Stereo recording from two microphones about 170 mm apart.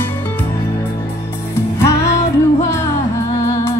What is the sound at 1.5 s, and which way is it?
Music, 15° left (ahead or behind).